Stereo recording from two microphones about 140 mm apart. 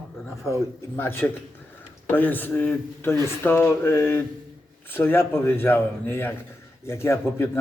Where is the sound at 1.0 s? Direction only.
15° left (ahead or behind).